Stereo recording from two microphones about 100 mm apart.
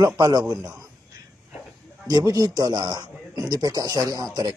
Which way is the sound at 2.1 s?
40° right (ahead or behind).